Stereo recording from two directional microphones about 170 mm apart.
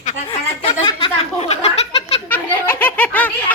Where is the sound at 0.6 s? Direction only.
30° left (ahead or behind).